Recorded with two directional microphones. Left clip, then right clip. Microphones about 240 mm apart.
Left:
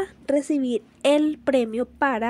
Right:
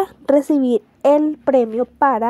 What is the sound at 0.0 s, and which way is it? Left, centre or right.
Speech, centre.